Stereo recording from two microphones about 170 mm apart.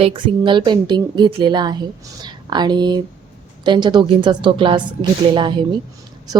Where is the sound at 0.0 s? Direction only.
30° right (ahead or behind).